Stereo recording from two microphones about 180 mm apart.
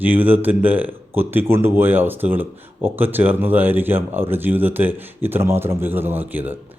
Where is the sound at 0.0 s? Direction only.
10° right (ahead or behind).